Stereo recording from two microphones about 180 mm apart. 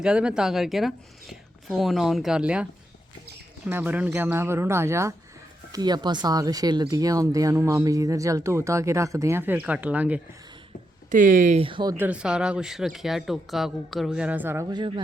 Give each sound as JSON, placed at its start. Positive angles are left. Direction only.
{"t": 0.0, "sound": "speech", "side_deg": -5}
{"t": 3.7, "sound": "speech", "side_deg": -10}
{"t": 11.1, "sound": "speech", "side_deg": -45}
{"t": 11.6, "sound": "speech", "side_deg": -25}
{"t": 11.9, "sound": "speech", "side_deg": -5}